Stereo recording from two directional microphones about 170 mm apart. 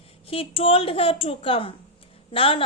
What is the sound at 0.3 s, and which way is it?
A woman's voice, 35° left (ahead or behind).